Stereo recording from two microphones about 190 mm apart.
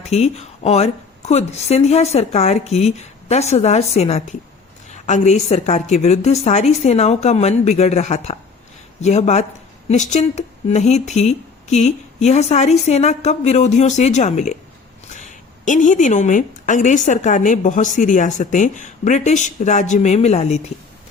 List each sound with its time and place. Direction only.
0.1 s a woman's voice: 35° left (ahead or behind)